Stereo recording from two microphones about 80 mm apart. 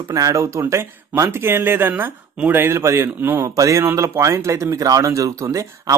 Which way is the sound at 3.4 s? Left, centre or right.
Right.